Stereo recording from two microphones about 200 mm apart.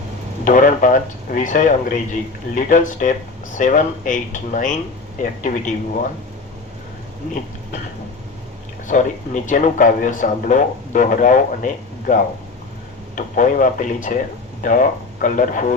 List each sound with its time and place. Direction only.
0.4 s speech: 40° left (ahead or behind)
8.9 s speech: 40° left (ahead or behind)
13.1 s speech: 40° left (ahead or behind)